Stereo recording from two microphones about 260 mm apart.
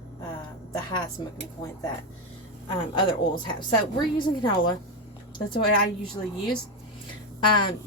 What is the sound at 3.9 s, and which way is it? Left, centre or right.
Speech, centre.